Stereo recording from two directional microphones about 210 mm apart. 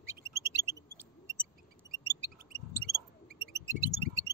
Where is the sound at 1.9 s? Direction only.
15° right (ahead or behind).